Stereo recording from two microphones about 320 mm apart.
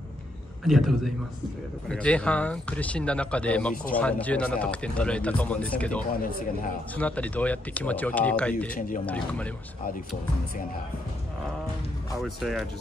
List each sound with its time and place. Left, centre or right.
0.7 s speech: centre
8.7 s speech: left
9.0 s speech: centre
12.2 s speech: centre